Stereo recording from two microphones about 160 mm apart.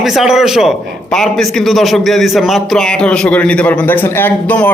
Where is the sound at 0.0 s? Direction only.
Centre (ahead or behind).